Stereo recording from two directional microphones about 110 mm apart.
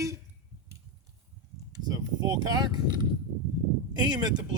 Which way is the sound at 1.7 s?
35° right (ahead or behind).